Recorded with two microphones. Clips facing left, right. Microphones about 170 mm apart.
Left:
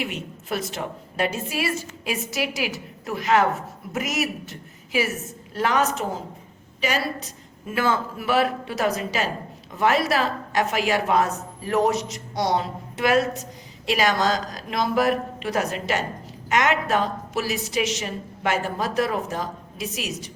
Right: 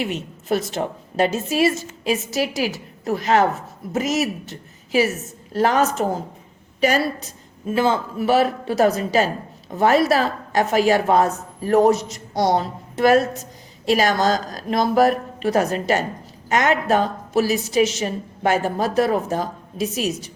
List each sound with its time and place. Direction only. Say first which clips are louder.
0.0 s a woman's voice: right 4 dB; 40° right (ahead or behind)
0.7 s a woman's voice: right 6 dB; 30° right (ahead or behind)
7.8 s a woman's voice: right 4 dB; 30° right (ahead or behind); by 20.1 s 45° right (ahead or behind)